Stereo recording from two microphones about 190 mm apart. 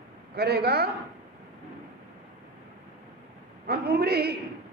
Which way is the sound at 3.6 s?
55° right (ahead or behind).